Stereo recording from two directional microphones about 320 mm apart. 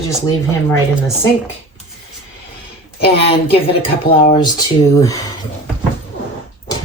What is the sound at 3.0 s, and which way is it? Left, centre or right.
Speech, centre.